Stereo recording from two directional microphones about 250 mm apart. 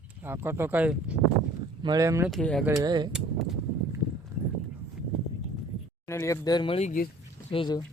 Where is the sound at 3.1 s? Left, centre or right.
Centre.